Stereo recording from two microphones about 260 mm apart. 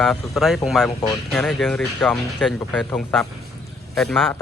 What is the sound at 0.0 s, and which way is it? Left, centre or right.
Speech, centre.